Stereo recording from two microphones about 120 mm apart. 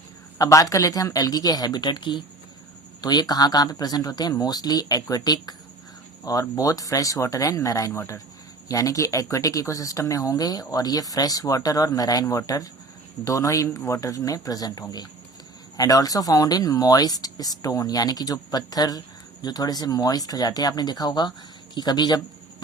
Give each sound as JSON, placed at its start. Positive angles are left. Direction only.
{"t": 0.3, "sound": "speech", "side_deg": 30}